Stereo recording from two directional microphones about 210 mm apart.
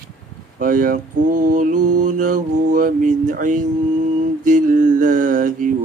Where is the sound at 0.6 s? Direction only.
40° right (ahead or behind).